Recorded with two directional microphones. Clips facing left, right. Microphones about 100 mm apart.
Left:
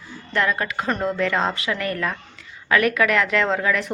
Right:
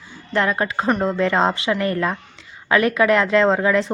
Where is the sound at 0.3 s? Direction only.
30° right (ahead or behind).